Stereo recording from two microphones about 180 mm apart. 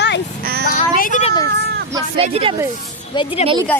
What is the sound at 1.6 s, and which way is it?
Hubbub, 65° right (ahead or behind).